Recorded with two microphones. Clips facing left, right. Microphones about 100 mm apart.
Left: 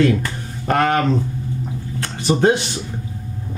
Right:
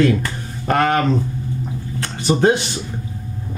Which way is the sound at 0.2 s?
15° right (ahead or behind).